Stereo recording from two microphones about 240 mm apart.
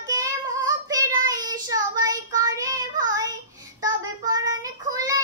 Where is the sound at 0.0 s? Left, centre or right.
Centre.